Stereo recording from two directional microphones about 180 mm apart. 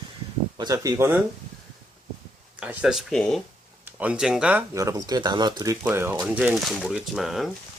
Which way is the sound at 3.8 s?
10° right (ahead or behind).